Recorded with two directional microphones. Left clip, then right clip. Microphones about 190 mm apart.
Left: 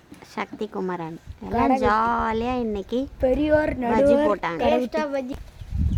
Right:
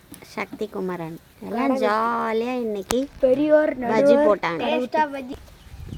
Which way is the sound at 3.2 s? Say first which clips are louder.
Right 3 dB; 35° left (ahead or behind).